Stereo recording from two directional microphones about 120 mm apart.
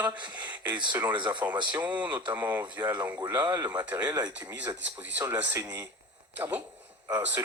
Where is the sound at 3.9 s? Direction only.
10° right (ahead or behind).